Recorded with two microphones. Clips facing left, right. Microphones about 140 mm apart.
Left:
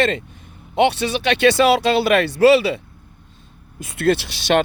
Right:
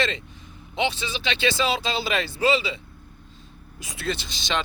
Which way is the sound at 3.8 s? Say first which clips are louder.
Left 12 dB; 60° left (ahead or behind).